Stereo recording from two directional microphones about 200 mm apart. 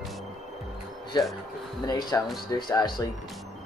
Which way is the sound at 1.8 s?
20° left (ahead or behind).